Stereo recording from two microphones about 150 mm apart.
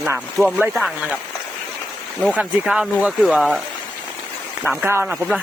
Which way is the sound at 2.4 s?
5° right (ahead or behind).